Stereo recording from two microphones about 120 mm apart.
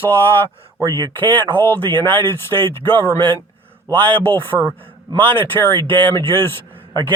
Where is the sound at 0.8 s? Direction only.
35° right (ahead or behind).